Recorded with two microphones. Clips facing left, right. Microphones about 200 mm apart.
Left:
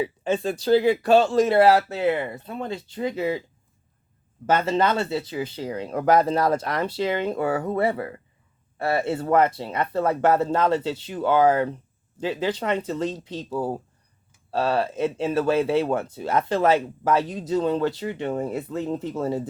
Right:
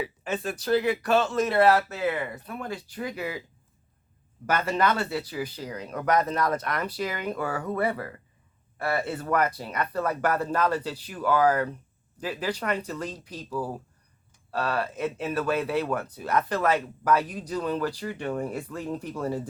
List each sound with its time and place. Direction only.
0.0 s speech: 25° left (ahead or behind)
4.4 s speech: 25° left (ahead or behind)